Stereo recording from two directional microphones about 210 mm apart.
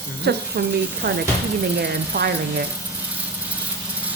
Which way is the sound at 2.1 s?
50° right (ahead or behind).